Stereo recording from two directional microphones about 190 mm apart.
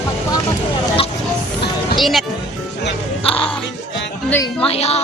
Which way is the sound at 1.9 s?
Centre (ahead or behind).